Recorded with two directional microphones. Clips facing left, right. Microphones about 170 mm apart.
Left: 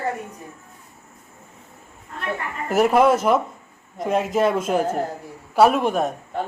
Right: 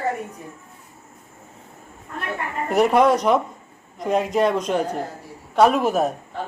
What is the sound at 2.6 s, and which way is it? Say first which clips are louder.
A woman's voice: even; centre (ahead or behind).